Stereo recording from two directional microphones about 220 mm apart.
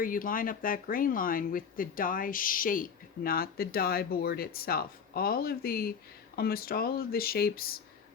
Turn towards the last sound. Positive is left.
turn(degrees=45)  # may be behind; listen again after turning